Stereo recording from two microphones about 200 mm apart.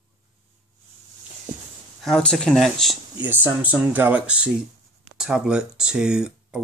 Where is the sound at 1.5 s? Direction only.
40° right (ahead or behind).